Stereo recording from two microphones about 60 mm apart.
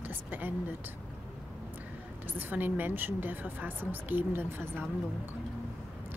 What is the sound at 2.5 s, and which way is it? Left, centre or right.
A woman's voice, right.